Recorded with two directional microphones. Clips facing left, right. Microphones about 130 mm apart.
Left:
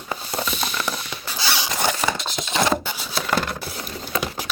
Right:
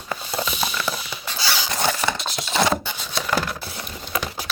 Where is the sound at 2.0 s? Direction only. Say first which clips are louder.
Even; centre (ahead or behind).